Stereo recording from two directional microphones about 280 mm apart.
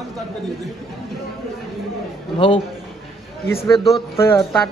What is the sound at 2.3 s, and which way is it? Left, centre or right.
Speech, centre.